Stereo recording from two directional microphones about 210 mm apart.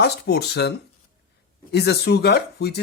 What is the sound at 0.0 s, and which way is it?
Speech, 50° left (ahead or behind).